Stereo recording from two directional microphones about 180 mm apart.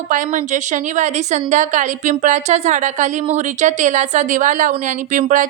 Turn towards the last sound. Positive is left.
turn(degrees=-45)  # may be behind; listen again after turning